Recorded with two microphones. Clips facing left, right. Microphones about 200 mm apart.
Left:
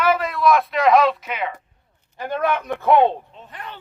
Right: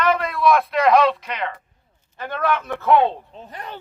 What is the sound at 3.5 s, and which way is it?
Speech, 40° right (ahead or behind).